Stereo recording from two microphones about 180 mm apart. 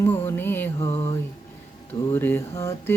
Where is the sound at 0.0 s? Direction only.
10° left (ahead or behind).